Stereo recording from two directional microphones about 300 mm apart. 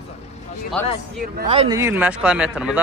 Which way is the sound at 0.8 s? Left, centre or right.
Centre.